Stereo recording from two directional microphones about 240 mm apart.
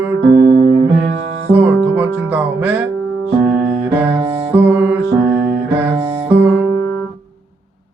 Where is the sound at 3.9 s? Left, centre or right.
Centre.